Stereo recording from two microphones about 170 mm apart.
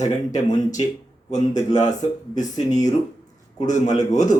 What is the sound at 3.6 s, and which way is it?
Speech, 45° left (ahead or behind).